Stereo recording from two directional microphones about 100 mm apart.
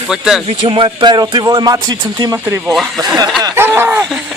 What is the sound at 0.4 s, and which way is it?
Speech, 60° right (ahead or behind).